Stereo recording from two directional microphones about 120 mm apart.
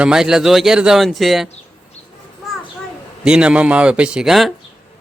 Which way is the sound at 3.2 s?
10° right (ahead or behind).